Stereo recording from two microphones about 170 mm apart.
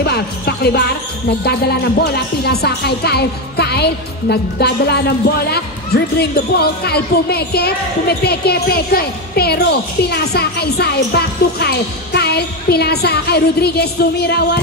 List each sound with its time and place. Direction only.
0.0 s music: 70° left (ahead or behind)
1.4 s speech: 70° left (ahead or behind)